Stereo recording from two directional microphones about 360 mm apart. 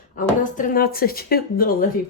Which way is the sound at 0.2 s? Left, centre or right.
Left.